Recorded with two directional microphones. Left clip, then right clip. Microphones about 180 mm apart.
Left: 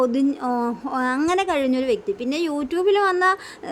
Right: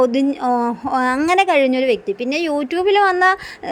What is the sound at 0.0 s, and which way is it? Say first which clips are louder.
Speech: right 5 dB; 15° right (ahead or behind).